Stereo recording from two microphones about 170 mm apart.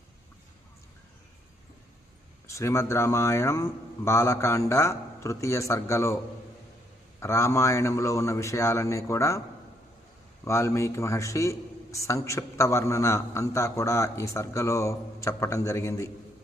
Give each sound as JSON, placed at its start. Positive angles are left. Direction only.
{"t": 2.5, "sound": "a man's voice", "side_deg": 15}
{"t": 7.2, "sound": "a man's voice", "side_deg": 15}
{"t": 10.4, "sound": "a man's voice", "side_deg": 15}